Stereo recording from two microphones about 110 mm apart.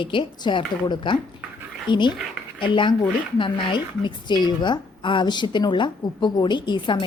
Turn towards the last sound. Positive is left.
turn(degrees=45)  # may be behind; listen again after turning